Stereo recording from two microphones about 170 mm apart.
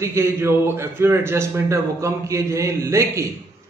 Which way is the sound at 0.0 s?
15° right (ahead or behind).